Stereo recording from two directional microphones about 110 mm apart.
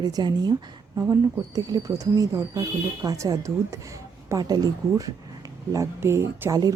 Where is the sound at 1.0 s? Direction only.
30° right (ahead or behind).